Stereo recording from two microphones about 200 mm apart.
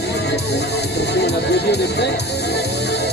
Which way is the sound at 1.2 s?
55° left (ahead or behind).